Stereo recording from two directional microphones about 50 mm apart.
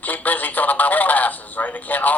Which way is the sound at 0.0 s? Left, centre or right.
Left.